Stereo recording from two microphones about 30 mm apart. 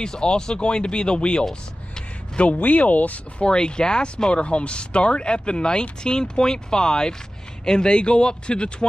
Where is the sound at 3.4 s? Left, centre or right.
Left.